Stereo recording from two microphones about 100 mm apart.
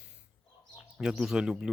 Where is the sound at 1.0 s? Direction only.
5° right (ahead or behind).